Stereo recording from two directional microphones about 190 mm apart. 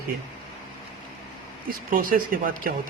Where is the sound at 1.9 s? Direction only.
45° right (ahead or behind).